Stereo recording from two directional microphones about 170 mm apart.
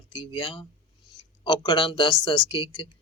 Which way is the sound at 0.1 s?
30° left (ahead or behind).